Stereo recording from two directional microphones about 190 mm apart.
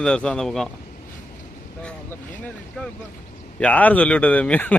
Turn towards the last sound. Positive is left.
turn(degrees=10)  # may be behind; listen again after turning